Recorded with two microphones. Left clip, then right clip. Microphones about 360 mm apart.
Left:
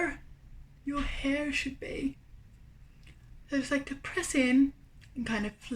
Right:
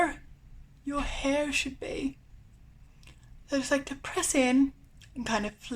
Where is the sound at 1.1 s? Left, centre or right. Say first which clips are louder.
Right 4 dB; centre.